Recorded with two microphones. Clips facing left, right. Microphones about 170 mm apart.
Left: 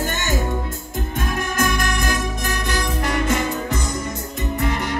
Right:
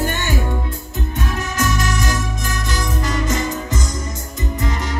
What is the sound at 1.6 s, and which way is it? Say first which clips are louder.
Music: right 1 dB; 55° left (ahead or behind).